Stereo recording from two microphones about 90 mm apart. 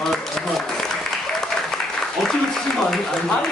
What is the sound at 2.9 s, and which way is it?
Speech, 5° left (ahead or behind).